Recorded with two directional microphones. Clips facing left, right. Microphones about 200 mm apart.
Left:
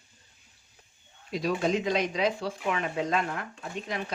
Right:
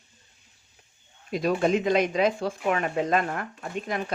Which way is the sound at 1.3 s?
55° right (ahead or behind).